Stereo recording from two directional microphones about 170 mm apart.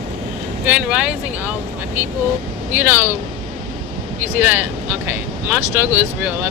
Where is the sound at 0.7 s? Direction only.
5° right (ahead or behind).